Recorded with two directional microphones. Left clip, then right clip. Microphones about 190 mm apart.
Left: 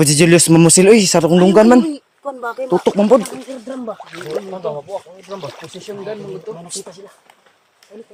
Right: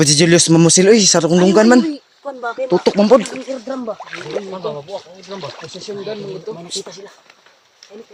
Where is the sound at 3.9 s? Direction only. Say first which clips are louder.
Even; 15° left (ahead or behind).